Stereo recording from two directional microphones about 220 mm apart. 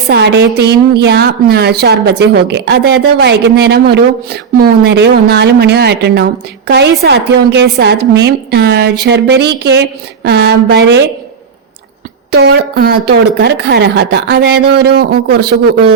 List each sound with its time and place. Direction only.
0.1 s a woman's voice: 50° right (ahead or behind)
12.3 s a woman's voice: 50° right (ahead or behind)